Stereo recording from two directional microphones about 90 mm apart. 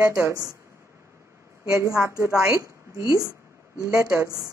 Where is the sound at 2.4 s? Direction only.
40° right (ahead or behind).